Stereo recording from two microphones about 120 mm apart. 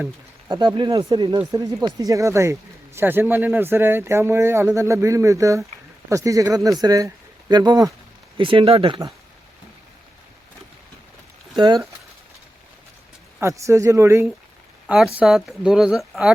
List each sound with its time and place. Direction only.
0.6 s speech: 40° right (ahead or behind)
11.5 s speech: 40° right (ahead or behind)
13.4 s speech: 25° right (ahead or behind)
14.8 s speech: 10° right (ahead or behind)